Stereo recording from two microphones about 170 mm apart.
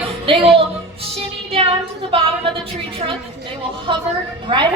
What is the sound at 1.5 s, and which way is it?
Child singing, 35° right (ahead or behind).